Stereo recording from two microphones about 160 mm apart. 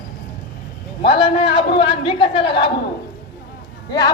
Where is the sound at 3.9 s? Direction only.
25° left (ahead or behind).